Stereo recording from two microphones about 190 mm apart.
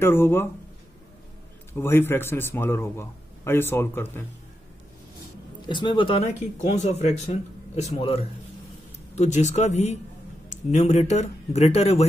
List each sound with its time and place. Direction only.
0.0 s a man's voice: 10° left (ahead or behind)
1.7 s a man's voice: 10° left (ahead or behind)
5.6 s speech: 25° left (ahead or behind)